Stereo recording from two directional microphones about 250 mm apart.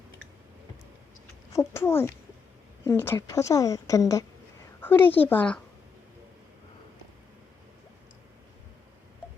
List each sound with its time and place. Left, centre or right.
1.5 s a woman's voice: centre